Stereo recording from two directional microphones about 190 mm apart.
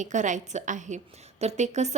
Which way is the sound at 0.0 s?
40° right (ahead or behind).